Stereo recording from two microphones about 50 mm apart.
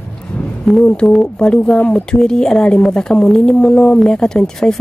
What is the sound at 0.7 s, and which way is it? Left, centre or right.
A woman's voice, centre.